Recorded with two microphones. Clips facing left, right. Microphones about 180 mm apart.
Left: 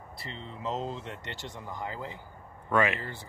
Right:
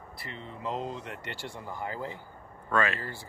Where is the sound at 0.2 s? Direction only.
25° left (ahead or behind).